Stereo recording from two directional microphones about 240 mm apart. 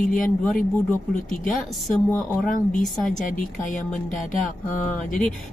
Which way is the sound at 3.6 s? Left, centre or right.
Left.